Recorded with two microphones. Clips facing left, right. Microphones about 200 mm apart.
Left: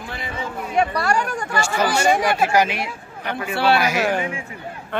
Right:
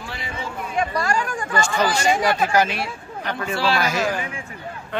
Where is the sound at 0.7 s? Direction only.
65° left (ahead or behind).